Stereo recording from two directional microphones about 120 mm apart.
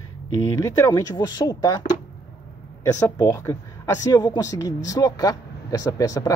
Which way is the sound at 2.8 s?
25° left (ahead or behind).